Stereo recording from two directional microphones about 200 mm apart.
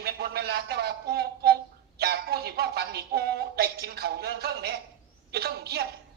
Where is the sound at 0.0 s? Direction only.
50° right (ahead or behind).